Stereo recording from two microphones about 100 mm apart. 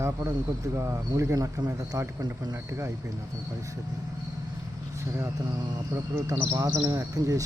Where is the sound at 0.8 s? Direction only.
30° right (ahead or behind).